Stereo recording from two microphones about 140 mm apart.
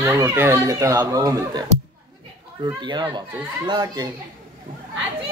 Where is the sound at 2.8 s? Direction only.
30° right (ahead or behind).